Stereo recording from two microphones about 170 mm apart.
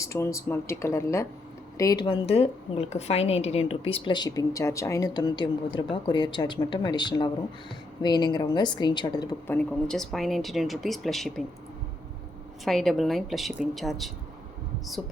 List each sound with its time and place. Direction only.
0.0 s a woman's voice: 15° left (ahead or behind)
2.0 s a woman's voice: 35° left (ahead or behind)
9.5 s speech: 5° left (ahead or behind)
12.6 s speech: centre (ahead or behind)